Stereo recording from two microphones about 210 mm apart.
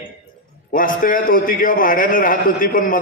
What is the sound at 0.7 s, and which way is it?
A man's voice, 40° left (ahead or behind).